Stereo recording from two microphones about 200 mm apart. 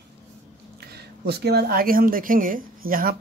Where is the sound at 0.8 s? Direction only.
55° right (ahead or behind).